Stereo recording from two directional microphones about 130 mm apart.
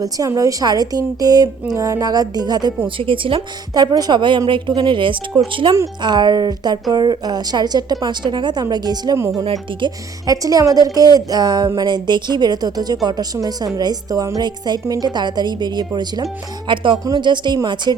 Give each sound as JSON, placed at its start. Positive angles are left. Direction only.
{"t": 0.0, "sound": "speech", "side_deg": -25}
{"t": 3.0, "sound": "a woman's voice", "side_deg": -40}